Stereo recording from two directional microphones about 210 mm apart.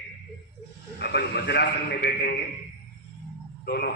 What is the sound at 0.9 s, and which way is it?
A man's voice, 50° left (ahead or behind).